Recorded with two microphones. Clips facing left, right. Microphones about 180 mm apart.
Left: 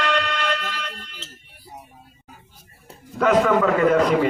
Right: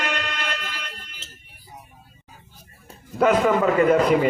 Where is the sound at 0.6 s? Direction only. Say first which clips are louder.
Left 4 dB; 85° left.